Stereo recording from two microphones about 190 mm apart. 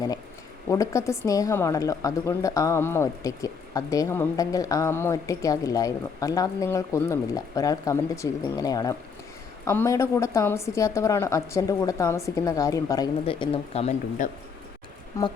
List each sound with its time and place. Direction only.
0.7 s a woman's voice: 15° left (ahead or behind)
13.2 s speech: 30° left (ahead or behind)